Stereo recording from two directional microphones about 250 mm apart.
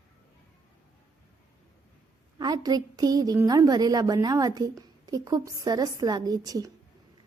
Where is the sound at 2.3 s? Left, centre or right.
Centre.